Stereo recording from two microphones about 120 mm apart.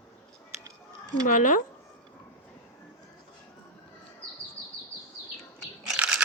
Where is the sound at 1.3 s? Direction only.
90° left.